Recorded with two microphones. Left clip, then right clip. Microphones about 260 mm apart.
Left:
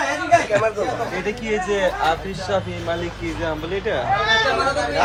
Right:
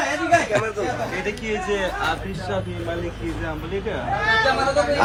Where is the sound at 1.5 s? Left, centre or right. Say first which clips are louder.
Left 5 dB; left.